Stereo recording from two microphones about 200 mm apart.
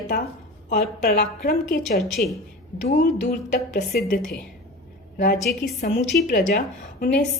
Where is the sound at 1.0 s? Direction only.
45° left (ahead or behind).